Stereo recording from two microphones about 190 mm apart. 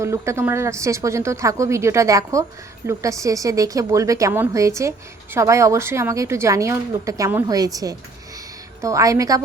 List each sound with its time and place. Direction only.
0.0 s speech: 15° right (ahead or behind)